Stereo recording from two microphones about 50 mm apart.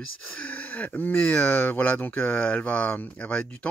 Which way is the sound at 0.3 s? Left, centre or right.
Left.